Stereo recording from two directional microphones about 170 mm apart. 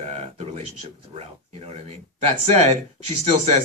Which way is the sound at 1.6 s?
35° right (ahead or behind).